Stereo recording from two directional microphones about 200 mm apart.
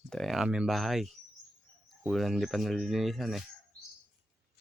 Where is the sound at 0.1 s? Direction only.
Centre (ahead or behind).